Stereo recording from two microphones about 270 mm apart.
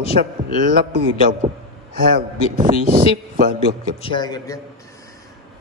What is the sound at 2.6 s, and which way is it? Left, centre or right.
Speech, centre.